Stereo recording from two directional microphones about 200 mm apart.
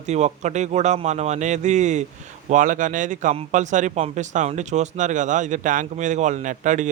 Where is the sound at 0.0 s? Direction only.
35° right (ahead or behind).